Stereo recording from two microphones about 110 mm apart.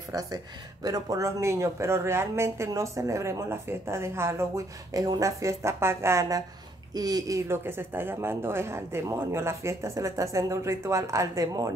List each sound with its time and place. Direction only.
0.8 s speech: 35° right (ahead or behind)